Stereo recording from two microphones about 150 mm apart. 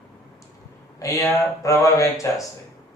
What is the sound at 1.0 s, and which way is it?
A man's voice, 20° left (ahead or behind).